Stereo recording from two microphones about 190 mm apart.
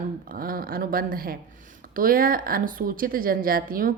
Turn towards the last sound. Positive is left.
turn(degrees=-50)  # may be behind; listen again after turning